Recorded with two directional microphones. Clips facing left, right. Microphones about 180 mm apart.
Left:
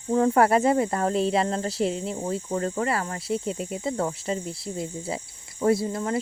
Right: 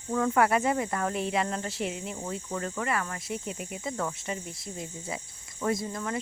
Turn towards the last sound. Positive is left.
turn(degrees=30)  # may be behind; listen again after turning